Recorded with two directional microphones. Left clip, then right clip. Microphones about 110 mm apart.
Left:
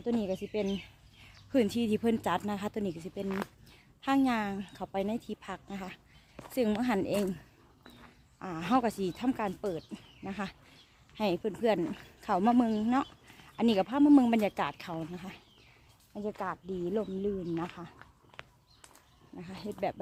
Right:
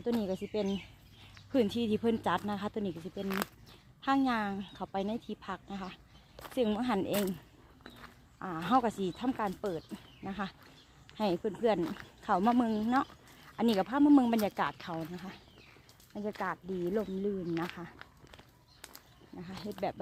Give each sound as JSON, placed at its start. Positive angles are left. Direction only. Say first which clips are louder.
{"t": 0.0, "sound": "speech", "louder": "left 1 dB", "side_deg": 20}
{"t": 1.5, "sound": "speech", "louder": "left 1 dB", "side_deg": 25}
{"t": 8.4, "sound": "speech", "louder": "even", "side_deg": 25}
{"t": 19.4, "sound": "speech", "louder": "left 2 dB", "side_deg": 25}